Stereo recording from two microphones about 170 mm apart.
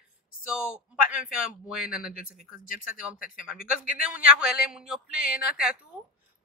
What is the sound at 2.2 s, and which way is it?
Speech, 55° left (ahead or behind).